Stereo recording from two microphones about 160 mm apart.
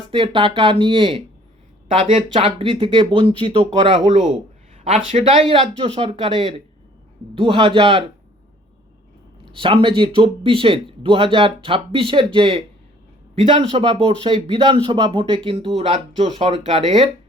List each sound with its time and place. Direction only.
0.1 s speech: 30° right (ahead or behind)
9.6 s speech: 30° right (ahead or behind)
16.2 s speech: 30° right (ahead or behind)